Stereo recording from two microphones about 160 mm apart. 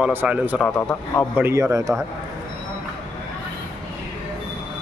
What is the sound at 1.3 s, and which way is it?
Speech, 15° right (ahead or behind).